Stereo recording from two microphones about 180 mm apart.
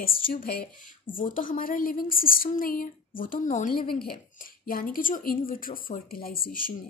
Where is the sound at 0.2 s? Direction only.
50° left (ahead or behind).